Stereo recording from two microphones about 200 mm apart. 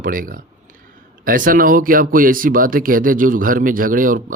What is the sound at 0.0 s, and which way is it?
Speech, 45° right (ahead or behind).